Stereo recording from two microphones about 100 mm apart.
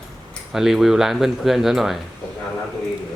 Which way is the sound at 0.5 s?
5° right (ahead or behind).